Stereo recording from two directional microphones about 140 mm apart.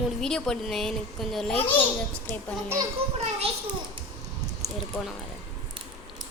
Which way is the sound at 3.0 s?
45° right (ahead or behind).